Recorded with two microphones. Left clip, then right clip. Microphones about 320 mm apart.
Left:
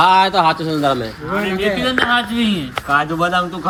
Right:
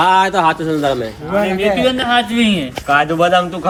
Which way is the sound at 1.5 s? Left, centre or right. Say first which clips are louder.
Right 2 dB; centre.